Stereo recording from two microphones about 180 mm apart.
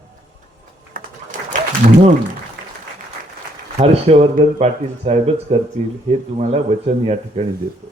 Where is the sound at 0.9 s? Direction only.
50° right (ahead or behind).